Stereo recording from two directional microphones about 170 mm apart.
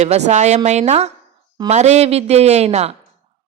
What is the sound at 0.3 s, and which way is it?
A woman's voice, 40° right (ahead or behind).